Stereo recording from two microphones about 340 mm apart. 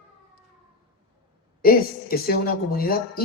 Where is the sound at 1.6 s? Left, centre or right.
Left.